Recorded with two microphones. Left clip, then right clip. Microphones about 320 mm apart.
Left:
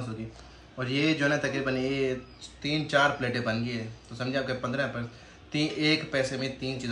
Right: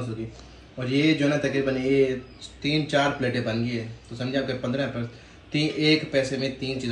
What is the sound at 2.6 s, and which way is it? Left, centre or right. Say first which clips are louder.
Speech: right 2 dB; centre.